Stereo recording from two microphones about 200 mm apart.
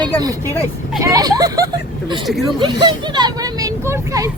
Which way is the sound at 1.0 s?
20° right (ahead or behind).